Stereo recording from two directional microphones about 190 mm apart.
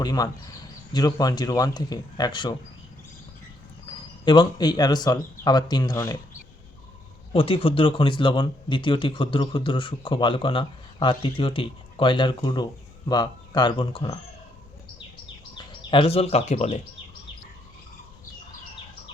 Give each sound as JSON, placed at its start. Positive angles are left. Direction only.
{"t": 0.0, "sound": "speech", "side_deg": 20}
{"t": 3.8, "sound": "speech", "side_deg": 25}
{"t": 7.3, "sound": "speech", "side_deg": 30}
{"t": 15.5, "sound": "speech", "side_deg": 25}